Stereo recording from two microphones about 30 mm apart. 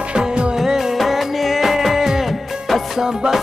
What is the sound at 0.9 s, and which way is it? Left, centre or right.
Music, centre.